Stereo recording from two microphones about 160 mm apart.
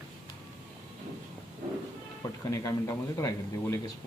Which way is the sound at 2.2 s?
20° left (ahead or behind).